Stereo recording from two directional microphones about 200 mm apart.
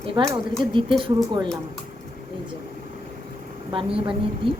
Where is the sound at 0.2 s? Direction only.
25° right (ahead or behind).